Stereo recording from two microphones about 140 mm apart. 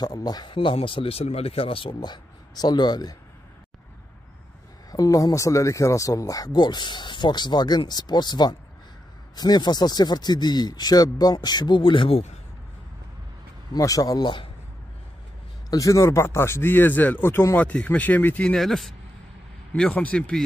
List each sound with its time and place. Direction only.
0.0 s speech: 30° left (ahead or behind)
4.9 s speech: 25° left (ahead or behind); by 12.3 s 40° left (ahead or behind)
13.7 s speech: 25° left (ahead or behind)
15.7 s speech: 25° left (ahead or behind); by 20.4 s 5° left (ahead or behind)